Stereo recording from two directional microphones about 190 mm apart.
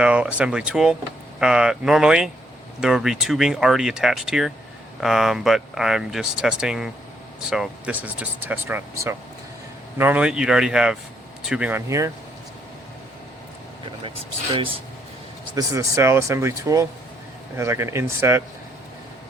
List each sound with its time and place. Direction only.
0.0 s speech: 5° right (ahead or behind)
14.5 s speech: 30° right (ahead or behind)
15.5 s speech: 15° right (ahead or behind)